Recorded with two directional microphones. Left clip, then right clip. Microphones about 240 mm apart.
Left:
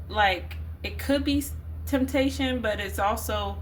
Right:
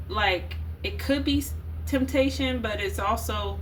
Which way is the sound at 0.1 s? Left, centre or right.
Left.